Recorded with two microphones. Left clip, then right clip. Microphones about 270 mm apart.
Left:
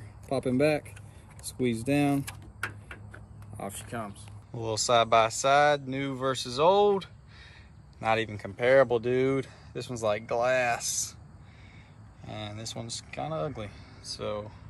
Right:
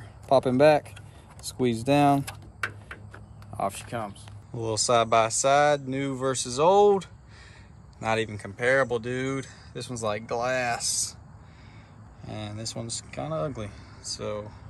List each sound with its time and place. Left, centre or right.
0.3 s a man's voice: centre
3.5 s speech: right
4.6 s speech: centre
12.2 s a man's voice: centre